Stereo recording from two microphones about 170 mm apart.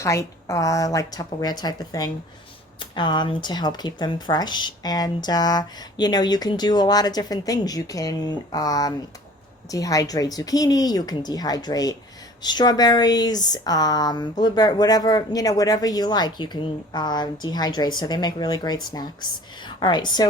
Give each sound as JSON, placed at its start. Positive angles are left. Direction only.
{"t": 0.0, "sound": "speech", "side_deg": 15}